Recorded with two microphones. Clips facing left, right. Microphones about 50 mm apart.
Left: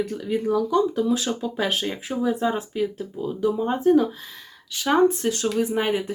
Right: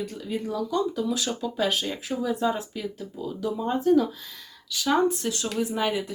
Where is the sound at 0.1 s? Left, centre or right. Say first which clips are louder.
Left 7 dB; left.